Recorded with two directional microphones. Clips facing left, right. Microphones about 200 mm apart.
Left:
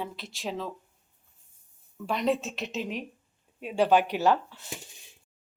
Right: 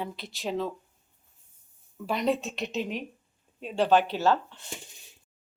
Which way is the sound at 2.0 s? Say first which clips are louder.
Even; centre (ahead or behind).